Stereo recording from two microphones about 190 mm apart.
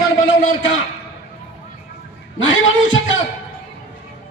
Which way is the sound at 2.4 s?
90° left.